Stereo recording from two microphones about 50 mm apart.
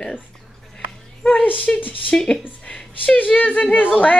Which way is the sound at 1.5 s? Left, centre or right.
Left.